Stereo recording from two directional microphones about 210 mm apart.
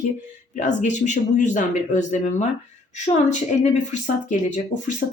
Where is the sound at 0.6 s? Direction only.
35° left (ahead or behind).